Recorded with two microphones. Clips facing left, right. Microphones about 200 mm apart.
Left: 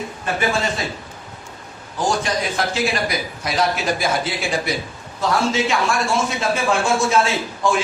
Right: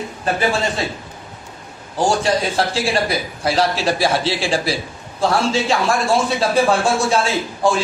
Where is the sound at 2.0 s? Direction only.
30° right (ahead or behind).